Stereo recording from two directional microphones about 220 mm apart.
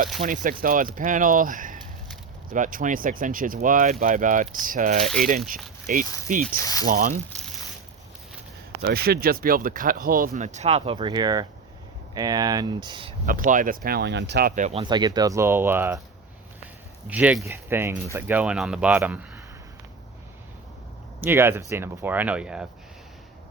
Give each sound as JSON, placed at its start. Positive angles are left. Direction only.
{"t": 0.2, "sound": "speech", "side_deg": -30}
{"t": 6.6, "sound": "speech", "side_deg": 15}
{"t": 6.8, "sound": "speech", "side_deg": -40}
{"t": 8.8, "sound": "speech", "side_deg": -45}
{"t": 13.2, "sound": "speech", "side_deg": -40}
{"t": 14.8, "sound": "speech", "side_deg": -20}
{"t": 17.1, "sound": "speech", "side_deg": -5}
{"t": 21.2, "sound": "speech", "side_deg": -10}